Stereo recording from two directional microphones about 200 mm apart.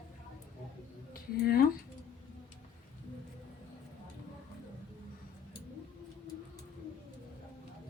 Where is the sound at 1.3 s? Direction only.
50° left (ahead or behind).